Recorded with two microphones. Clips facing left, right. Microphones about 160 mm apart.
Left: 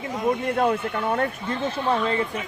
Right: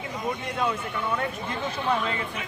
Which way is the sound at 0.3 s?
55° left (ahead or behind).